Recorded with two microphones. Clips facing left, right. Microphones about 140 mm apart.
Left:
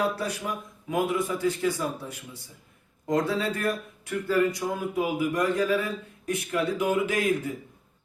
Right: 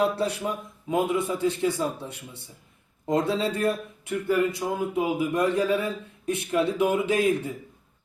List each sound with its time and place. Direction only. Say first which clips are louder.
0.0 s speech: right 3 dB; 30° right (ahead or behind)